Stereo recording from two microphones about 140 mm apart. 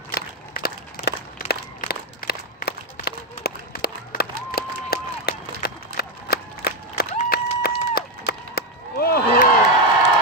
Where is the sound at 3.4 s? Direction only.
90° left.